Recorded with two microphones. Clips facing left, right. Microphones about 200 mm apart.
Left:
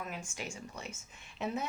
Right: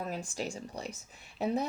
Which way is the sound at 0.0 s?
35° right (ahead or behind).